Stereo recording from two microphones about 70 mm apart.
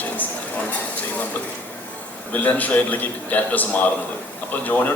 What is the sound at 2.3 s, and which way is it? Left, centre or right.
A man's voice, left.